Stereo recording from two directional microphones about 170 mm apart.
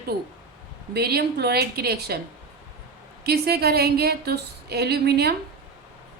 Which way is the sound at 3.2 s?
70° right (ahead or behind).